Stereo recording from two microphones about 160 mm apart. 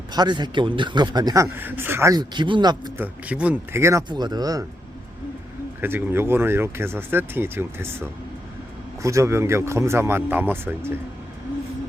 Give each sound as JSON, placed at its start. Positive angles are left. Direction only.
{"t": 0.1, "sound": "speech", "side_deg": -25}
{"t": 3.0, "sound": "speech", "side_deg": -10}
{"t": 5.8, "sound": "speech", "side_deg": -15}